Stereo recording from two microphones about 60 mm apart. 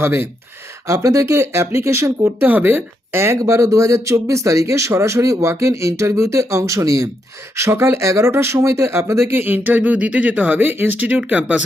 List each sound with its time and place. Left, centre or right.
0.0 s speech: right
0.9 s speech: right
2.2 s speech: right
3.3 s speech: right
7.5 s speech: right
8.3 s speech: right
9.3 s speech: right